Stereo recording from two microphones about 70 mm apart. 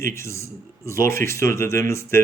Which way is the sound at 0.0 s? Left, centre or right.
Left.